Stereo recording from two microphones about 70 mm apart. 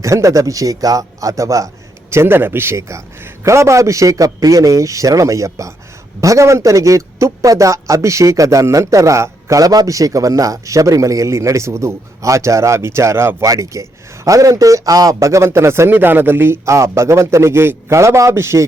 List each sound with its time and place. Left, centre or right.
0.0 s a man's voice: right
2.0 s a man's voice: right
13.4 s a man's voice: right